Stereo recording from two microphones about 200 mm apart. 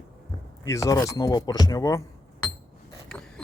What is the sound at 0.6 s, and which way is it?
Speech, 15° left (ahead or behind).